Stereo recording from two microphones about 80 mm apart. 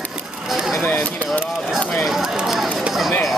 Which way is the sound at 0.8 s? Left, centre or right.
Centre.